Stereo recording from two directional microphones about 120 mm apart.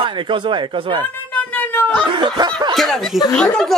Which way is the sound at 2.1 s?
40° right (ahead or behind).